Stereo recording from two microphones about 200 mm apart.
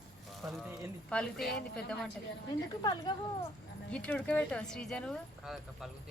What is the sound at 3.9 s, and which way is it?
Speech, 5° left (ahead or behind).